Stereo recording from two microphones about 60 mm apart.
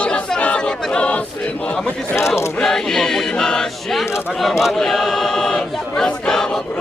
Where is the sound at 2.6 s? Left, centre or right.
Centre.